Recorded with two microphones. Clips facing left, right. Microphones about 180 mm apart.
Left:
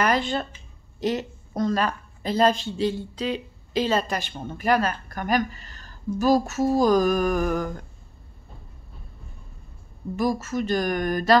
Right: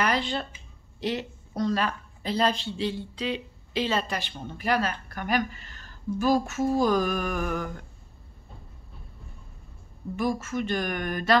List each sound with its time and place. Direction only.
0.0 s a sound: 45° left (ahead or behind)
1.0 s speech: 45° left (ahead or behind)
10.1 s speech: 40° left (ahead or behind)